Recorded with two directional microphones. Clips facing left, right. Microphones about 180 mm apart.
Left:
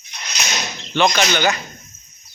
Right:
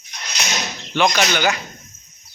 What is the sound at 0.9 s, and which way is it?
Speech, 5° right (ahead or behind).